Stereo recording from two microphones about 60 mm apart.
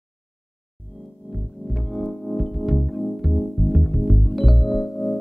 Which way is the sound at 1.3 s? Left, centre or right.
Centre.